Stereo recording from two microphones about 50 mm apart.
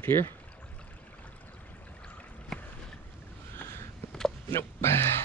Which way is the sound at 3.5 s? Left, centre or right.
Left.